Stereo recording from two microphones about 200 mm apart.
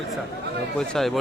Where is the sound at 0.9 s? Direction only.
Centre (ahead or behind).